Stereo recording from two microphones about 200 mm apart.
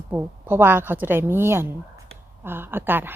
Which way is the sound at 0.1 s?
10° right (ahead or behind).